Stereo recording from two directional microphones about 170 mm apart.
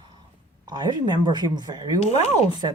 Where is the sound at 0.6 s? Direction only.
25° right (ahead or behind).